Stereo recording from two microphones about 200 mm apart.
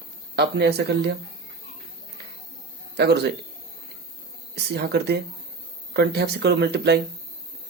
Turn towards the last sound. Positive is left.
turn(degrees=-55)  # may be behind; listen again after turning